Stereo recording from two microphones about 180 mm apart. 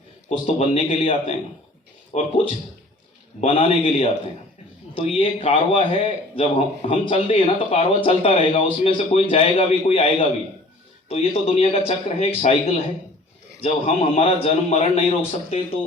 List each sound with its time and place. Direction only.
0.3 s speech: 35° left (ahead or behind)
13.6 s speech: 35° left (ahead or behind)